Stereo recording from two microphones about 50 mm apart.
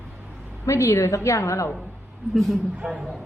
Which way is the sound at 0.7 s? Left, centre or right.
Left.